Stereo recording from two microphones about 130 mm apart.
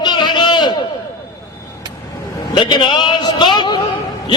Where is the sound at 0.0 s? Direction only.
35° left (ahead or behind).